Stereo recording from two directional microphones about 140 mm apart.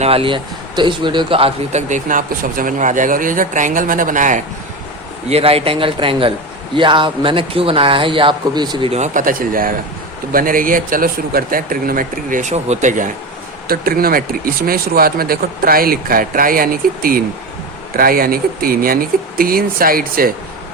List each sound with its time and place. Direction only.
0.0 s speech: 45° right (ahead or behind)
1.9 s speech: 70° right (ahead or behind)
5.3 s speech: 45° right (ahead or behind)
8.9 s speech: 60° right (ahead or behind)
13.7 s speech: 90° right